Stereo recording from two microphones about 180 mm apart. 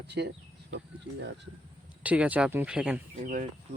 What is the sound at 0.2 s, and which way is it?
Speech, 65° right (ahead or behind).